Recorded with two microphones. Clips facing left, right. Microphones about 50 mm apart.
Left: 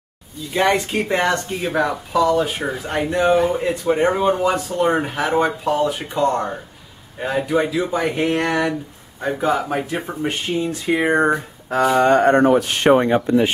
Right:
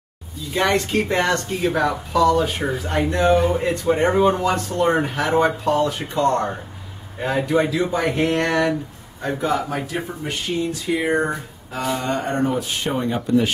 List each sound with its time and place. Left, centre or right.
0.5 s speech: centre
10.0 s speech: left
11.7 s speech: left
13.0 s speech: left